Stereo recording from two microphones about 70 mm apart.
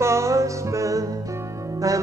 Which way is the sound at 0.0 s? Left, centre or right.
Right.